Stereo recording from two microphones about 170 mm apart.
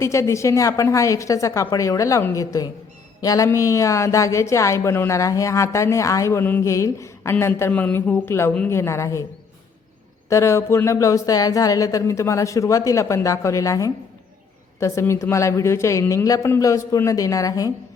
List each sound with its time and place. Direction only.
0.0 s speech: 15° left (ahead or behind)
10.2 s speech: 15° left (ahead or behind)